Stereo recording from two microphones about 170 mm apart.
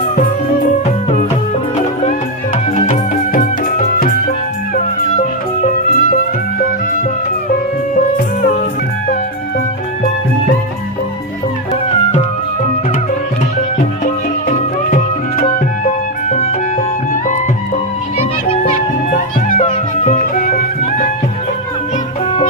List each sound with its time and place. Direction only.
2.7 s music: 45° left (ahead or behind)
5.6 s music: 55° left (ahead or behind)
13.7 s music: 50° left (ahead or behind)
18.6 s music: 50° left (ahead or behind)